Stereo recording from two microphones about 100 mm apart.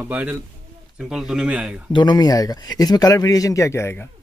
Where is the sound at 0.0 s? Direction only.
15° right (ahead or behind).